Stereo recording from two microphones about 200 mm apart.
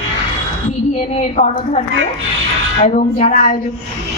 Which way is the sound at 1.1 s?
35° left (ahead or behind).